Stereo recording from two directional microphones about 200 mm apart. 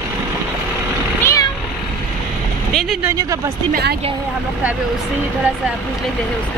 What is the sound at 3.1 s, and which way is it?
Speech, 15° right (ahead or behind).